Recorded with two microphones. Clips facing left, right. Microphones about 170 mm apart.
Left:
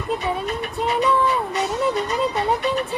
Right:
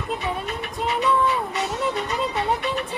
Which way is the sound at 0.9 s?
40° left (ahead or behind).